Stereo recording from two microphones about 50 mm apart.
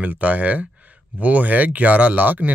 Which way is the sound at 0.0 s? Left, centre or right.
Right.